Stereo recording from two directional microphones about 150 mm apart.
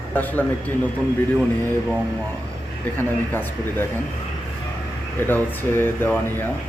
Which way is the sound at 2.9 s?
15° left (ahead or behind).